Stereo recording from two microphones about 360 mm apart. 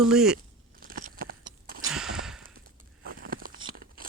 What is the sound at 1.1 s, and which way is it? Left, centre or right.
Clip-clop, right.